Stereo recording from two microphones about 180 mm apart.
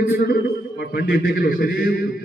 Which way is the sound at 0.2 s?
55° left (ahead or behind).